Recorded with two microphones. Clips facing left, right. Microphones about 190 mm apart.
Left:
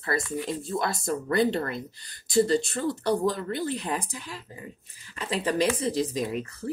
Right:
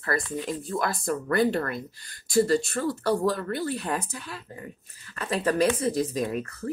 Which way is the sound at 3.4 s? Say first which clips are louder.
Even; 20° left (ahead or behind).